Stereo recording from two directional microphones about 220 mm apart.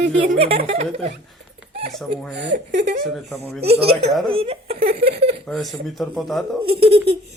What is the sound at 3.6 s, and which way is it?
Speech, 25° right (ahead or behind).